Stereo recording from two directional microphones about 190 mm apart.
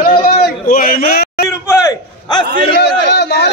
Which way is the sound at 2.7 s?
60° left (ahead or behind).